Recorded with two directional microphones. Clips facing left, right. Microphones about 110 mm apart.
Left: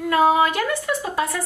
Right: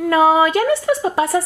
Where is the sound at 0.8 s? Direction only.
35° right (ahead or behind).